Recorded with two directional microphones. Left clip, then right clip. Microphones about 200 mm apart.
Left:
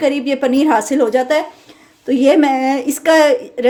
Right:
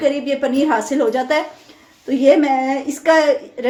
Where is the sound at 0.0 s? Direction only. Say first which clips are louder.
Left 2 dB; 40° left (ahead or behind).